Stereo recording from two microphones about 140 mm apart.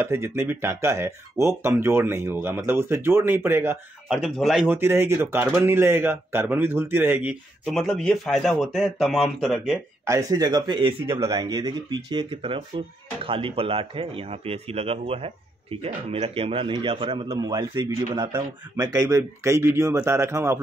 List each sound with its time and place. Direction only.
0.0 s speech: 15° right (ahead or behind)
4.4 s speech: centre (ahead or behind)
4.6 s speech: 15° right (ahead or behind)
7.6 s speech: centre (ahead or behind)
10.0 s speech: 25° right (ahead or behind)